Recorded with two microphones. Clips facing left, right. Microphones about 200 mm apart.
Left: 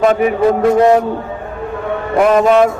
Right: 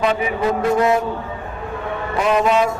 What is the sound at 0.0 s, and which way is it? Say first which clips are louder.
Speech: left 7 dB; 50° left (ahead or behind).